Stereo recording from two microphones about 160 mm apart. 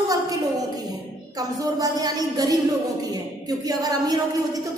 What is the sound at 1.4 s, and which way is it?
A woman's voice, 25° right (ahead or behind).